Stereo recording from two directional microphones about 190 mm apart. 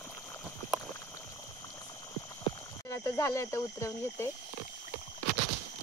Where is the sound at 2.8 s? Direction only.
15° left (ahead or behind).